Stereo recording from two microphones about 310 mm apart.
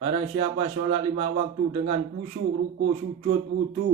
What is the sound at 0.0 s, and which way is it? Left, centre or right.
A man's voice, centre.